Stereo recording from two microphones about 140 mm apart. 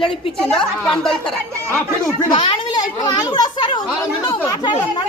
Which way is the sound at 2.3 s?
35° left (ahead or behind).